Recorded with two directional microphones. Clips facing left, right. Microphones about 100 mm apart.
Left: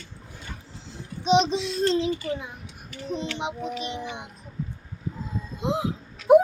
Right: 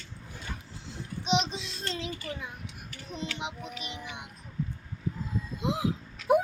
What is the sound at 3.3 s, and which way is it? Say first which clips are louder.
Speech: left 8 dB; 30° left (ahead or behind).